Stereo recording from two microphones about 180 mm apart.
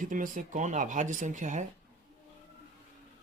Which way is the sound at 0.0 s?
45° right (ahead or behind).